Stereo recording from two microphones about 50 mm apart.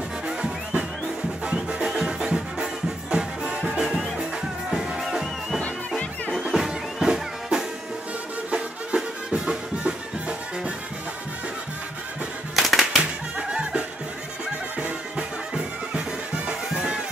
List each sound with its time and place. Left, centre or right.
1.4 s music: centre
12.5 s music: centre
13.4 s music: centre